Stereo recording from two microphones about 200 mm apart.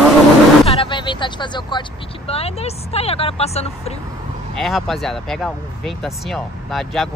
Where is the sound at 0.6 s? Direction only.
30° left (ahead or behind).